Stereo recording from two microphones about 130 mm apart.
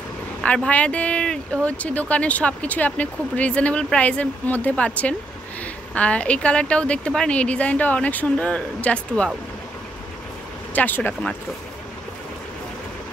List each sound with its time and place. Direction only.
0.4 s speech: 10° left (ahead or behind)
10.7 s speech: 15° left (ahead or behind)